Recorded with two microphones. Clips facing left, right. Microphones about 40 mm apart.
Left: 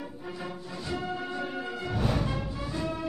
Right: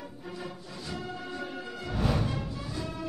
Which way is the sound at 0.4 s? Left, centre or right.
Left.